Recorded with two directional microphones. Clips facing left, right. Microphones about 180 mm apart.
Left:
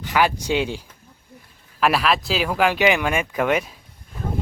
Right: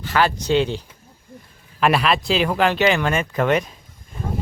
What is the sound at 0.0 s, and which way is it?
Speech, 15° left (ahead or behind).